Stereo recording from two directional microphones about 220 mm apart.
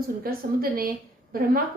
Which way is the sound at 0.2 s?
40° right (ahead or behind).